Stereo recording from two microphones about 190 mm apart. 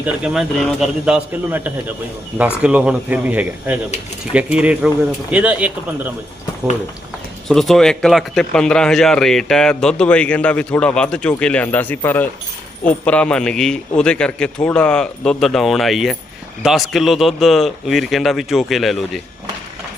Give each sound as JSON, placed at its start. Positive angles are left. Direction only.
{"t": 0.0, "sound": "a man's voice", "side_deg": 0}
{"t": 7.4, "sound": "a man's voice", "side_deg": 0}